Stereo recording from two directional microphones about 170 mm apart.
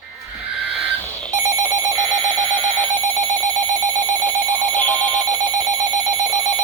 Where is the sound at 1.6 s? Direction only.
20° right (ahead or behind).